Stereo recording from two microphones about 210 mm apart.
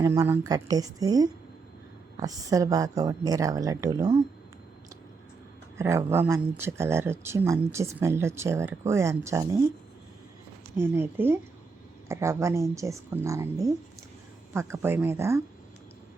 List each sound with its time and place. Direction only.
0.0 s speech: 15° right (ahead or behind)
5.7 s speech: 10° right (ahead or behind)
10.8 s speech: 10° right (ahead or behind)